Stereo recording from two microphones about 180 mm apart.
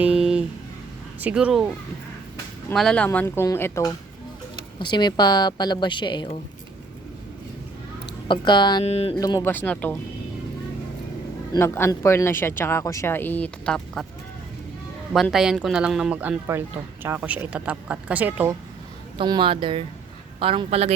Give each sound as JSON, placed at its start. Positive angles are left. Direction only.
{"t": 0.0, "sound": "a sound", "side_deg": -5}
{"t": 1.2, "sound": "speech", "side_deg": -5}
{"t": 2.7, "sound": "a woman's voice", "side_deg": 5}
{"t": 8.3, "sound": "a woman's voice", "side_deg": 25}
{"t": 8.8, "sound": "a sound", "side_deg": 35}
{"t": 9.1, "sound": "speech", "side_deg": 20}
{"t": 11.5, "sound": "speech", "side_deg": 15}
{"t": 15.1, "sound": "speech", "side_deg": 0}
{"t": 19.1, "sound": "a man's voice", "side_deg": -25}